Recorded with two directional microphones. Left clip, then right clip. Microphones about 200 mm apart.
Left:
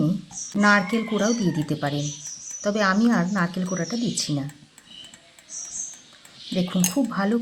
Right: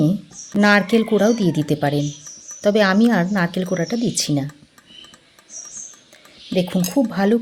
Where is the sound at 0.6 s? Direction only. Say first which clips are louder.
Right 4 dB; 35° right (ahead or behind).